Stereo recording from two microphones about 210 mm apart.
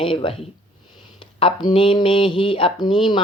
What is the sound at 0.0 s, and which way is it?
Speech, 25° left (ahead or behind).